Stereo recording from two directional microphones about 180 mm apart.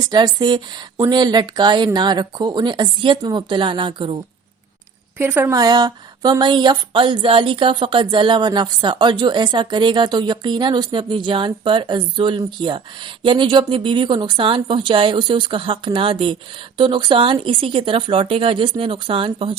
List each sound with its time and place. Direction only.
0.1 s a woman's voice: 25° right (ahead or behind)
5.1 s a woman's voice: 10° right (ahead or behind); by 19.5 s 30° right (ahead or behind)